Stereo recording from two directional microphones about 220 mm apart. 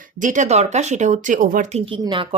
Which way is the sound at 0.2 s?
35° right (ahead or behind).